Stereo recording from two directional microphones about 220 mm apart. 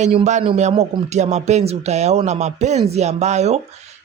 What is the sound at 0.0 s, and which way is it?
Speech, 30° right (ahead or behind).